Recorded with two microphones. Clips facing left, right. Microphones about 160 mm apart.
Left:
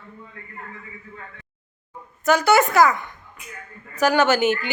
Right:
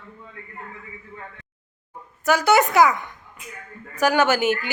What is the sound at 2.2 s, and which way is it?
A man's voice, 15° right (ahead or behind).